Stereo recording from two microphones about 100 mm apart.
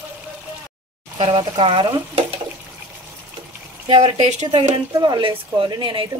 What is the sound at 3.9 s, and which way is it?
Speech, 60° right (ahead or behind).